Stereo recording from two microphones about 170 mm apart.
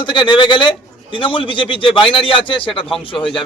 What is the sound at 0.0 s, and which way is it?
A man's voice, 25° left (ahead or behind).